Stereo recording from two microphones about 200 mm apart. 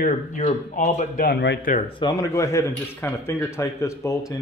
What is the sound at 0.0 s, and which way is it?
Speech, 40° left (ahead or behind).